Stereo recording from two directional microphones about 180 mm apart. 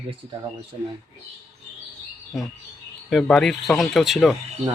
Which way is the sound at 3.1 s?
Centre (ahead or behind).